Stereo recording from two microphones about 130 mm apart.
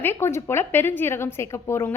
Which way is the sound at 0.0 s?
20° left (ahead or behind).